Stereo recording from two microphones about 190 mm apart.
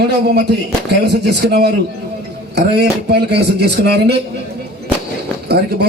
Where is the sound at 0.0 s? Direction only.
60° right (ahead or behind).